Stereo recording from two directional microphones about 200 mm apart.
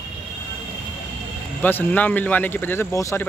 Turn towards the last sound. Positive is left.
turn(degrees=15)  # may be behind; listen again after turning